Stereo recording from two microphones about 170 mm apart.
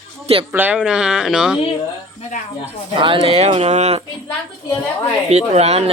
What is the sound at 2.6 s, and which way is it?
Speech, 30° right (ahead or behind).